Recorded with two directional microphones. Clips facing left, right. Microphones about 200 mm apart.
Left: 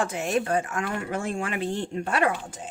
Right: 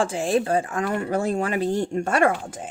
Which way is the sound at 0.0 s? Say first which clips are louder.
Right 4 dB; 30° right (ahead or behind).